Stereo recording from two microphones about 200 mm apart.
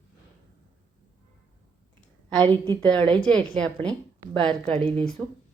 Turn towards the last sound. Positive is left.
turn(degrees=5)  # may be behind; listen again after turning